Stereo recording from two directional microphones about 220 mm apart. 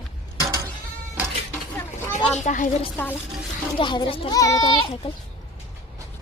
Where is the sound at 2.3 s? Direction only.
35° left (ahead or behind).